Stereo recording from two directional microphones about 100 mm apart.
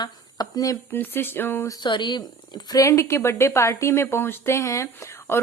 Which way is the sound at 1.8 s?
50° left (ahead or behind).